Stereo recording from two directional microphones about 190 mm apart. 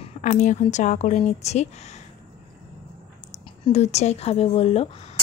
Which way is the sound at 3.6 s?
35° left (ahead or behind).